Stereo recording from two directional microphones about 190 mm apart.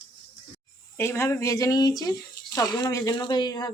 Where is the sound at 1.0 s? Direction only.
15° left (ahead or behind).